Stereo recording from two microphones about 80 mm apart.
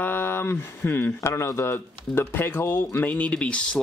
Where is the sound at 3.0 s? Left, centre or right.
Centre.